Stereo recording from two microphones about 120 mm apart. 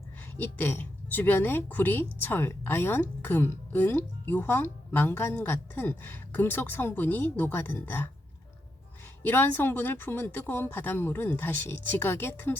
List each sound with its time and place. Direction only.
0.3 s speech: 15° left (ahead or behind)
9.2 s speech: 15° left (ahead or behind)